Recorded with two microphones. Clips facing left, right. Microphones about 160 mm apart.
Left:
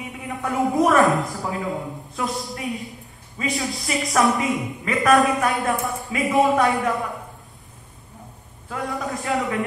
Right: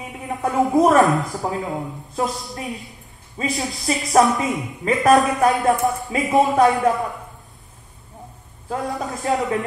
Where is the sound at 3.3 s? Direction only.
35° right (ahead or behind).